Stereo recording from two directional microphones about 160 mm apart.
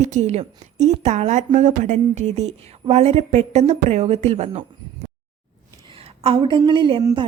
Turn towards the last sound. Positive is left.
turn(degrees=-30)  # may be behind; listen again after turning